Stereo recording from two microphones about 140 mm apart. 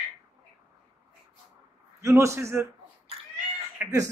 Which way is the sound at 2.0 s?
20° right (ahead or behind).